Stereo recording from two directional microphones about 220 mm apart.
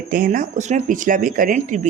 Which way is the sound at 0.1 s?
40° right (ahead or behind).